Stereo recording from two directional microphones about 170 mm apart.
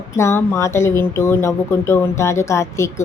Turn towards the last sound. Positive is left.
turn(degrees=15)  # may be behind; listen again after turning